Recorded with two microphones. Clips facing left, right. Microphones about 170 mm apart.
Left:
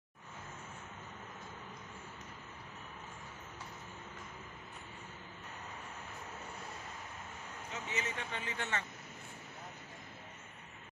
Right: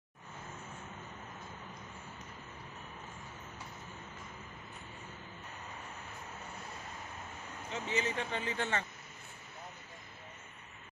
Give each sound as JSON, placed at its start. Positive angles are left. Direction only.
{"t": 7.7, "sound": "speech", "side_deg": -30}